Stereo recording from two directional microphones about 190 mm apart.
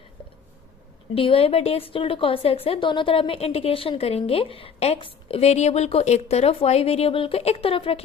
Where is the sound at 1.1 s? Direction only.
30° left (ahead or behind).